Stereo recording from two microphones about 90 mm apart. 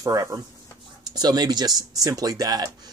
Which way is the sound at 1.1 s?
50° right (ahead or behind).